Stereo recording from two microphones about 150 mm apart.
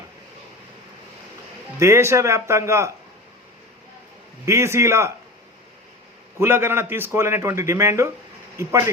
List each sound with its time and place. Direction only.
1.8 s speech: 20° right (ahead or behind)
4.4 s speech: 20° right (ahead or behind)
6.4 s a man's voice: 15° right (ahead or behind)